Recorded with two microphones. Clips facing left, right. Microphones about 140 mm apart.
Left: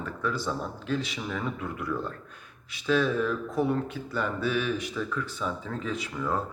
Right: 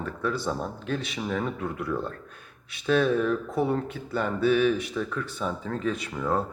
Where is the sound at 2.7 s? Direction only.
55° right (ahead or behind).